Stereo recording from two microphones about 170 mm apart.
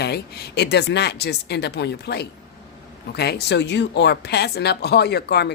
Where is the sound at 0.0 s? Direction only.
70° left (ahead or behind).